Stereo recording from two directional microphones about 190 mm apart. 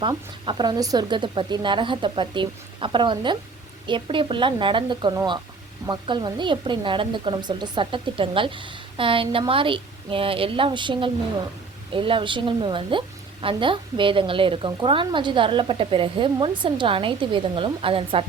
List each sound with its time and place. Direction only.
0.0 s a woman's voice: 25° right (ahead or behind)